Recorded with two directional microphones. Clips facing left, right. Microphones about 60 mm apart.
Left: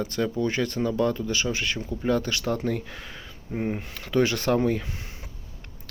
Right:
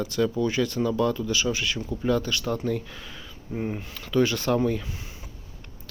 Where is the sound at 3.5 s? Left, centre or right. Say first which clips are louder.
Left 2 dB; left.